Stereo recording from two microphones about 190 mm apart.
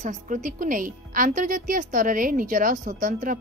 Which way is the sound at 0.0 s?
40° right (ahead or behind).